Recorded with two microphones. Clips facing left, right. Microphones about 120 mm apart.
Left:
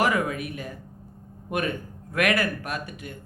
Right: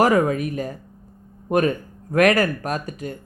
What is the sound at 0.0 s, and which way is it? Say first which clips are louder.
Speech: right 7 dB; 40° right (ahead or behind).